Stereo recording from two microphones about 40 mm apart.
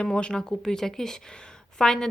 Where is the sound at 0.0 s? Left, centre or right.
Left.